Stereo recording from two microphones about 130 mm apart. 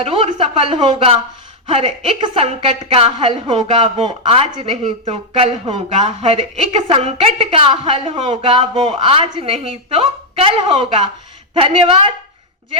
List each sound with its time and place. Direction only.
0.0 s speech: 45° right (ahead or behind)